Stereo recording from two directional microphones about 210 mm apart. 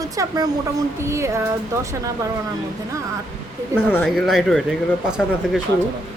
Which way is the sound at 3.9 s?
5° left (ahead or behind).